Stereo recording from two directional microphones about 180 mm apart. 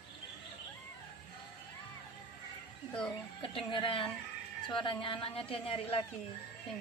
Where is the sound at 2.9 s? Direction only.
5° left (ahead or behind).